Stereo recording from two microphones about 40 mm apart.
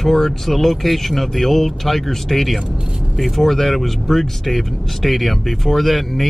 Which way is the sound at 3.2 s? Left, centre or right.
Centre.